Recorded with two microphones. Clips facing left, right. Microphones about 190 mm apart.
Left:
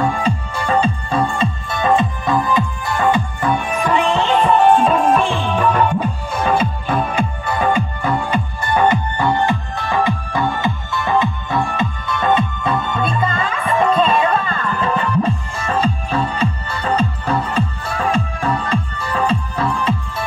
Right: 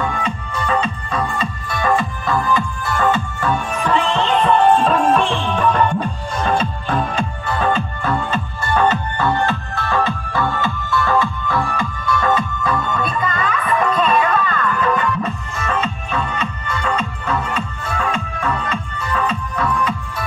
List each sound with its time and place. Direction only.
0.0 s music: 30° left (ahead or behind)